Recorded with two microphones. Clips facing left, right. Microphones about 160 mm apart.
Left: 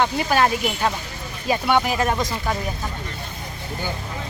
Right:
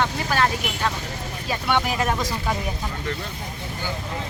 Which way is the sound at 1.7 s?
5° left (ahead or behind).